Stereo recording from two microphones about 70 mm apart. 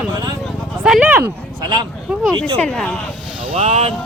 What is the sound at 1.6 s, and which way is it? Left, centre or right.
Speech, right.